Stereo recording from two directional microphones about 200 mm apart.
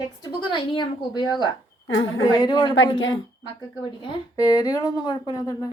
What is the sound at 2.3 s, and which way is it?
Speech, 20° left (ahead or behind).